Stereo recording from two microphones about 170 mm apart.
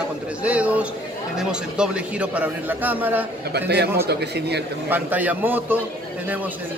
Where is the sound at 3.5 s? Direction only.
75° right (ahead or behind).